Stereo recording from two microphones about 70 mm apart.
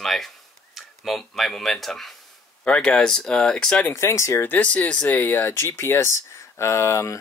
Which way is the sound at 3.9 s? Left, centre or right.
Left.